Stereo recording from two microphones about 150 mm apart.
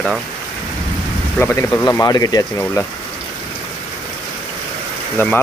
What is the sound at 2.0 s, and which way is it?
Speech, 25° left (ahead or behind).